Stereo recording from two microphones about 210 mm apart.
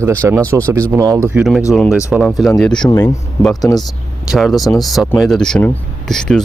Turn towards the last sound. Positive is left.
turn(degrees=5)  # may be behind; listen again after turning